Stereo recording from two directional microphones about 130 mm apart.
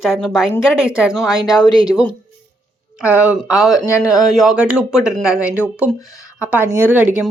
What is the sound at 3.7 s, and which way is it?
Speech, 25° left (ahead or behind).